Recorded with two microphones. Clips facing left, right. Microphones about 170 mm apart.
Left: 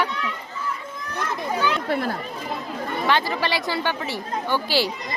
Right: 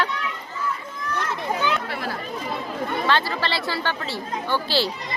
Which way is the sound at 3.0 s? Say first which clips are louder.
Left 2 dB; 15° left (ahead or behind).